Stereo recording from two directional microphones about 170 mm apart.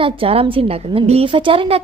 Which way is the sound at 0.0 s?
35° right (ahead or behind).